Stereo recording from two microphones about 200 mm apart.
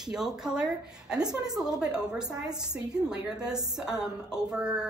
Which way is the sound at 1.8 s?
5° right (ahead or behind).